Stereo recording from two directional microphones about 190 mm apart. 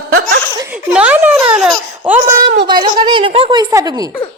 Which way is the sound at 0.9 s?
5° right (ahead or behind).